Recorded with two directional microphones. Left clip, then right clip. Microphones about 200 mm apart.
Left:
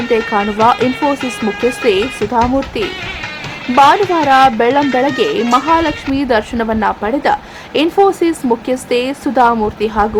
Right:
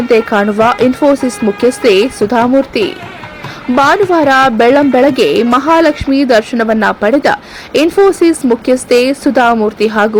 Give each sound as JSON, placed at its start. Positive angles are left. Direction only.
{"t": 0.1, "sound": "speech", "side_deg": -20}